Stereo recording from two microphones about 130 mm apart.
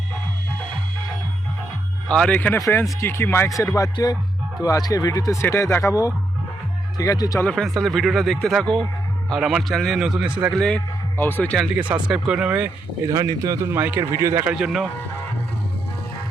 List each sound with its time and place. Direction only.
2.0 s speech: 5° left (ahead or behind)
2.6 s speech: 20° left (ahead or behind)
3.8 s speech: 30° left (ahead or behind)
7.4 s a man's voice: 5° left (ahead or behind)
10.5 s a man's voice: 5° left (ahead or behind)
11.8 s speech: 10° right (ahead or behind)
13.1 s a man's voice: 30° right (ahead or behind)
14.5 s a man's voice: centre (ahead or behind)